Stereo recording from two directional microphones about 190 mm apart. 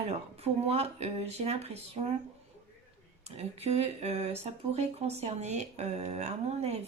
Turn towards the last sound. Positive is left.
turn(degrees=-35)  # may be behind; listen again after turning